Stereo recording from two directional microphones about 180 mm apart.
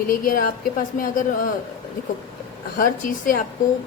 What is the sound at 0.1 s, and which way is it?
A woman's voice, 50° left (ahead or behind).